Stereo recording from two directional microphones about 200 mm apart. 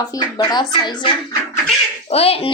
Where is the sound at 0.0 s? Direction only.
20° left (ahead or behind).